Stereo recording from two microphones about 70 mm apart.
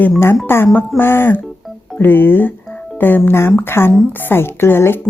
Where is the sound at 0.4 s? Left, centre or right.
Left.